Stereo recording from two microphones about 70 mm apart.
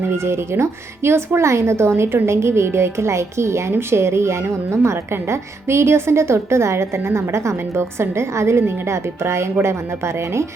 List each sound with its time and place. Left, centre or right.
0.0 s a woman's voice: right